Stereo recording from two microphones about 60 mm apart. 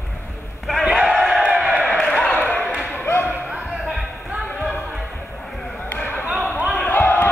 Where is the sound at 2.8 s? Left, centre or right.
Left.